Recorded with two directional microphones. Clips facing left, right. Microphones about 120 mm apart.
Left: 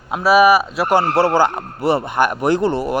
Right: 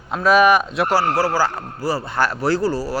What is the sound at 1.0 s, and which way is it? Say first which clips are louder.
A man's voice: left 4 dB; 25° left (ahead or behind).